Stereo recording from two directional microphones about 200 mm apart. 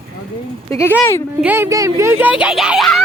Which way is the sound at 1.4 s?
10° right (ahead or behind).